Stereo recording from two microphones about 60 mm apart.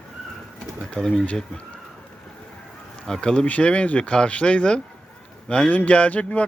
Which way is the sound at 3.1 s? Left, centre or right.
Centre.